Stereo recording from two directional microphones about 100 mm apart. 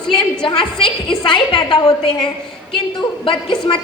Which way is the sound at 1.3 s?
55° left (ahead or behind).